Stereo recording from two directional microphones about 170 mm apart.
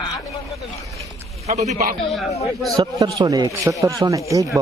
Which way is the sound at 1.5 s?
45° right (ahead or behind).